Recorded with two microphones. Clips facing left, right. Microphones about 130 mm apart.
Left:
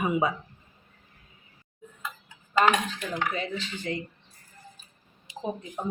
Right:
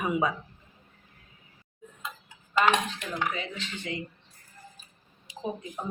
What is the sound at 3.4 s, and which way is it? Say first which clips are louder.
Speech: left 4 dB; 35° left (ahead or behind).